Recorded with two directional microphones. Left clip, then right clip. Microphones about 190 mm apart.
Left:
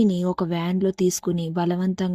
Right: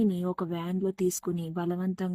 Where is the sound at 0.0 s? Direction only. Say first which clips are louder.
Left 7 dB; 35° left (ahead or behind).